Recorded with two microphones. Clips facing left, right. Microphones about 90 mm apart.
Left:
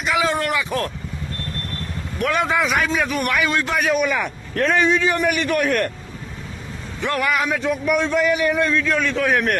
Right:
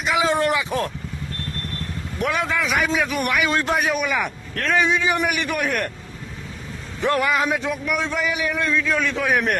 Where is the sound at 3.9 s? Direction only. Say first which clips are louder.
Left 3 dB; centre (ahead or behind).